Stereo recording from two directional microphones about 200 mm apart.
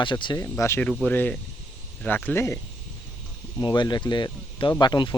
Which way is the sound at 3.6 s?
20° left (ahead or behind).